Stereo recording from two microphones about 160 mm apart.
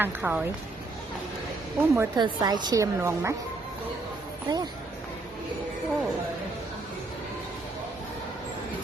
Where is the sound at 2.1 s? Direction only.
25° right (ahead or behind).